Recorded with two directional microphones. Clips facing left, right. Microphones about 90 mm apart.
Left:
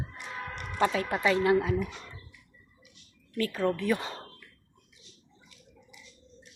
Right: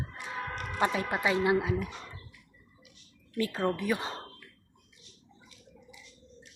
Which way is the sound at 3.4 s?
20° right (ahead or behind).